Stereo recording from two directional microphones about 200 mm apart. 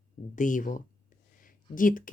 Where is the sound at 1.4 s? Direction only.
40° left (ahead or behind).